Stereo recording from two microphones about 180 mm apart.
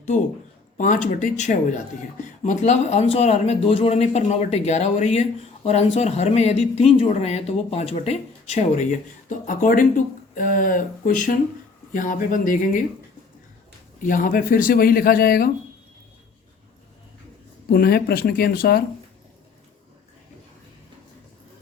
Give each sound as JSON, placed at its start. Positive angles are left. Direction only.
{"t": 0.8, "sound": "speech", "side_deg": 45}
{"t": 14.0, "sound": "speech", "side_deg": 45}
{"t": 17.7, "sound": "speech", "side_deg": 60}